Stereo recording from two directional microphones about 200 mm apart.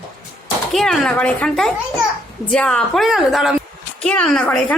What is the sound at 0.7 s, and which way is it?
Speech, centre (ahead or behind).